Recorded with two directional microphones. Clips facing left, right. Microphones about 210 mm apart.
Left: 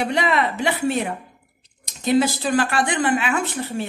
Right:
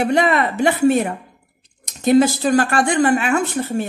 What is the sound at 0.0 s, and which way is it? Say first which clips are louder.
Speech: right 4 dB; 50° right (ahead or behind).